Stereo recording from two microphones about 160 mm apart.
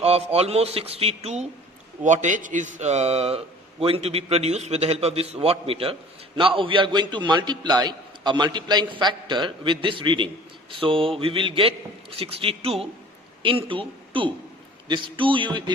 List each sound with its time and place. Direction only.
0.0 s a man's voice: 40° right (ahead or behind)